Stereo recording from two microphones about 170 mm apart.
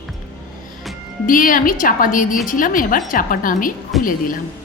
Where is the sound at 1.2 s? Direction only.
55° left (ahead or behind).